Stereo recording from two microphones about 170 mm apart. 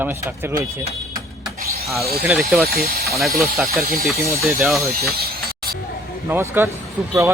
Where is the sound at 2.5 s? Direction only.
5° right (ahead or behind).